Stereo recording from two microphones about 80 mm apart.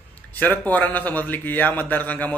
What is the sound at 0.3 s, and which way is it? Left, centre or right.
A man's voice, centre.